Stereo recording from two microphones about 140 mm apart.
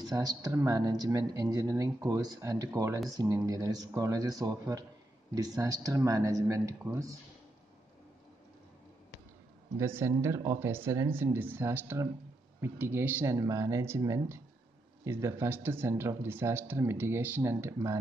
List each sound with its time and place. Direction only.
0.1 s speech: 25° right (ahead or behind)
9.8 s speech: 20° right (ahead or behind)